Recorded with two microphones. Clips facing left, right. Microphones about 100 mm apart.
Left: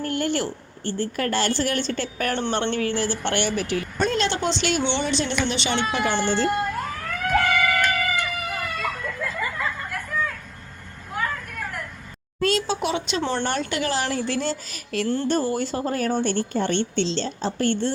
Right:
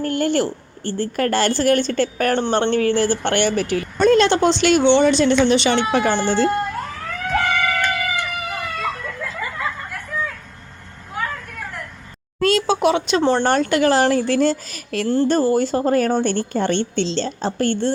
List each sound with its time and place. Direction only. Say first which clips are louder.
0.0 s a woman's voice: right 5 dB; 40° right (ahead or behind); by 5.8 s 55° right (ahead or behind)
6.5 s emergency vehicle: right 2 dB; 5° left (ahead or behind)
7.6 s music: right 1 dB; 5° left (ahead or behind)
8.5 s a sound: right 3 dB; centre (ahead or behind)
11.1 s vehicle: right 1 dB; centre (ahead or behind)
12.4 s speech: right 6 dB; 65° right (ahead or behind); by 15.1 s 50° right (ahead or behind)
15.1 s a woman's voice: right 8 dB; 35° right (ahead or behind)